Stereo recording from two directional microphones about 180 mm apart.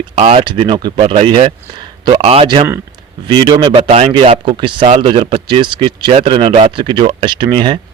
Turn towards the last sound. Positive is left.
turn(degrees=-25)  # may be behind; listen again after turning